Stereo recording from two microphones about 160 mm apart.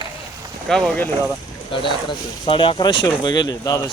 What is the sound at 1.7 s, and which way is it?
Speech, 30° left (ahead or behind).